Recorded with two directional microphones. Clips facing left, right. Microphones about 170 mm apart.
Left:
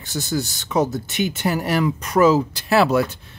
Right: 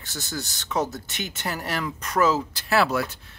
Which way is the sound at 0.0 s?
15° left (ahead or behind).